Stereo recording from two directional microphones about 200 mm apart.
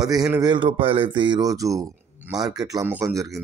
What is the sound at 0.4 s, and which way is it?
A man's voice, 25° right (ahead or behind).